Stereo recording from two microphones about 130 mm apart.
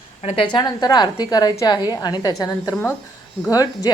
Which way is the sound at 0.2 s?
55° left (ahead or behind).